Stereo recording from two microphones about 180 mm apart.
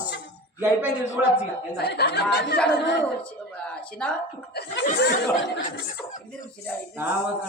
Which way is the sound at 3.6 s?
5° left (ahead or behind).